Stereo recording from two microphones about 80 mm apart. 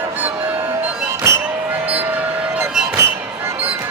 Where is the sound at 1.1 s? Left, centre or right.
Right.